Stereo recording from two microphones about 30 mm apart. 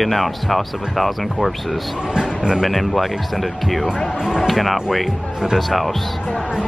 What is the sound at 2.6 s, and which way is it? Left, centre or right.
Speech, centre.